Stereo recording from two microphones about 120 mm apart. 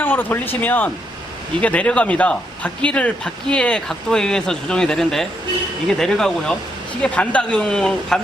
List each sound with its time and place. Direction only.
0.0 s speech: 15° left (ahead or behind)